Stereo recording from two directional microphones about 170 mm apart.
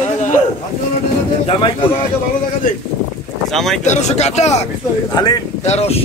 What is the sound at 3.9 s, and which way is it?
Speech, 40° left (ahead or behind).